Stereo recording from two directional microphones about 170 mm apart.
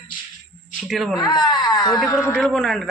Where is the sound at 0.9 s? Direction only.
Centre (ahead or behind).